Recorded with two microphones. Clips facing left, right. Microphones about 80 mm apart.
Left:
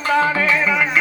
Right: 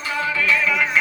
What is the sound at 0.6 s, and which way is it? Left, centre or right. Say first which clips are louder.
Music: left 2 dB; centre.